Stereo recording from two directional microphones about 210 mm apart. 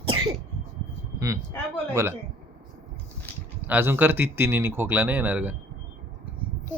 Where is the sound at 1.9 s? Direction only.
15° right (ahead or behind).